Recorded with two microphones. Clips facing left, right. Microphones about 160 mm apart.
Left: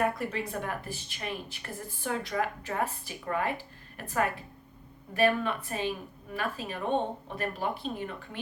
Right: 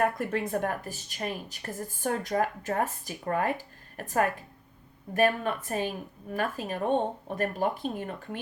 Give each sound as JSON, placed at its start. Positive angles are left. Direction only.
{"t": 0.2, "sound": "a woman's voice", "side_deg": -50}